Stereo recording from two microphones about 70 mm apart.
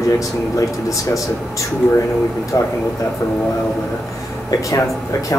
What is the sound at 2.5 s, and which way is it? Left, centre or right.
Speech, left.